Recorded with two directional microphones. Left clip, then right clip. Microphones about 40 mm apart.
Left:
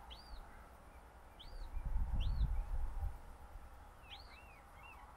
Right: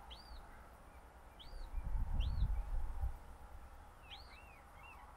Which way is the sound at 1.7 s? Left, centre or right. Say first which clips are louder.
Even; centre.